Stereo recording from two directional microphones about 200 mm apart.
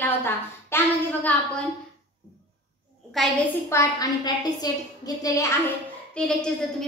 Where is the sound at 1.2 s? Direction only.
5° left (ahead or behind).